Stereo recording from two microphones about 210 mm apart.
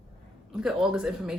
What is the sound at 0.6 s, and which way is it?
Speech, centre (ahead or behind).